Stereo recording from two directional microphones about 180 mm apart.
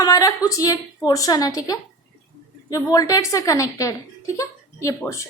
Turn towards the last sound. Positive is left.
turn(degrees=15)  # may be behind; listen again after turning